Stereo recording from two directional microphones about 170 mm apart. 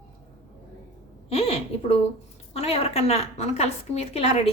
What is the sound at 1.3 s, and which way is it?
A woman's voice, 35° left (ahead or behind).